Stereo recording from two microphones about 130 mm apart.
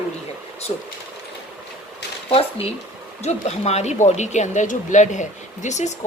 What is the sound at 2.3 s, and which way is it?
Speech, 50° left (ahead or behind).